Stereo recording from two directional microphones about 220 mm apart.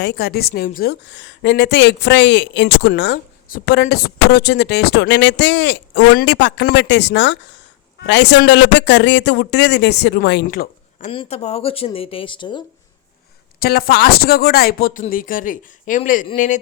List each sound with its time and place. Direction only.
0.0 s a woman's voice: 45° left (ahead or behind)
10.4 s speech: 40° left (ahead or behind)
11.1 s speech: 25° left (ahead or behind)
13.6 s a woman's voice: 45° left (ahead or behind)